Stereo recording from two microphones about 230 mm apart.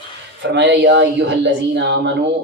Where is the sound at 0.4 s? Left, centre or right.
Right.